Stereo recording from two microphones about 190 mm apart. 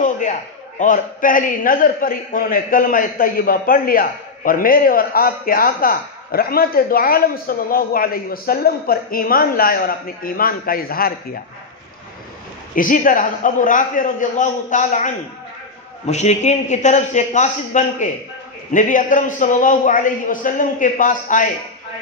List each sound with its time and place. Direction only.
0.0 s a man's voice: 40° left (ahead or behind)
12.7 s a man's voice: 45° left (ahead or behind)